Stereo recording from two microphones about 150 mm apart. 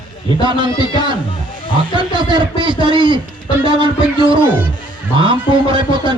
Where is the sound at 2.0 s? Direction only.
30° right (ahead or behind).